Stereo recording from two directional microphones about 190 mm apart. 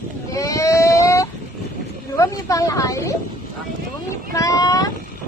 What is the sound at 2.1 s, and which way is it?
A woman's voice, 15° left (ahead or behind).